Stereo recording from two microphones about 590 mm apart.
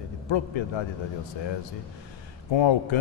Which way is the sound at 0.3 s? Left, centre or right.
Left.